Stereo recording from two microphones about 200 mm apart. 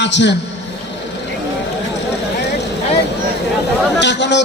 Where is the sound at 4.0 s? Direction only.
60° left (ahead or behind).